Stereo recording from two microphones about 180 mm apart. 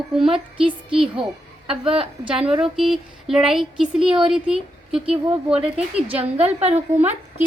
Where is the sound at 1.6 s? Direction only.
30° right (ahead or behind).